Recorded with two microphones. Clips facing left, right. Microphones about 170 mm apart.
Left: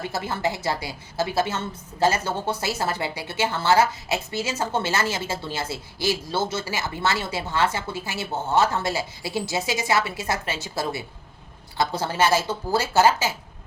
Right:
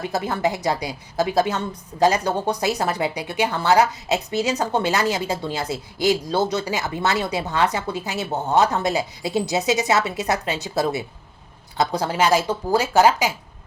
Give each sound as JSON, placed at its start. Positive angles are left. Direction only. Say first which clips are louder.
{"t": 0.0, "sound": "a woman's voice", "louder": "right 4 dB", "side_deg": -20}